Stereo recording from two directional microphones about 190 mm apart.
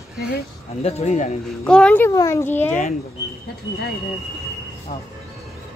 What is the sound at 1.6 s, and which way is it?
A child's voice, 5° left (ahead or behind).